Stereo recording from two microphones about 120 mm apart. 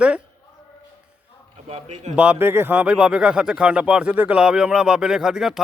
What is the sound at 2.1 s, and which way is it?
Speech, 15° right (ahead or behind).